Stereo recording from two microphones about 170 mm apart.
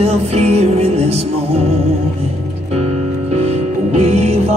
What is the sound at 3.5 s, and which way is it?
Music, 40° right (ahead or behind).